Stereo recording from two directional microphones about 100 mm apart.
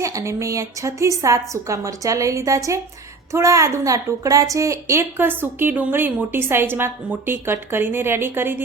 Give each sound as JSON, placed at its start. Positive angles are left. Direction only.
{"t": 0.0, "sound": "a woman's voice", "side_deg": -30}